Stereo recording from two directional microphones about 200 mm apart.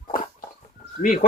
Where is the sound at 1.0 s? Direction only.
45° left (ahead or behind).